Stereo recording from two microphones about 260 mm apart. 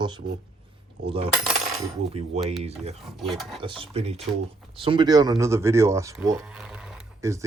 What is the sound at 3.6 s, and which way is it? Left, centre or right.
Speech, centre.